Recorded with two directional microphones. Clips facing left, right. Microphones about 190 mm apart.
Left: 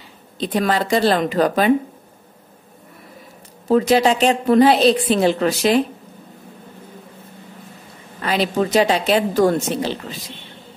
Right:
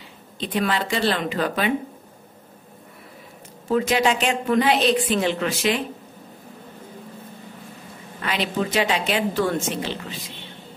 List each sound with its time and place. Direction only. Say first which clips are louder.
0.4 s a woman's voice: left 4 dB; 40° left (ahead or behind)
3.6 s a woman's voice: left 5 dB; 35° left (ahead or behind)
8.2 s a woman's voice: left 5 dB; 40° left (ahead or behind)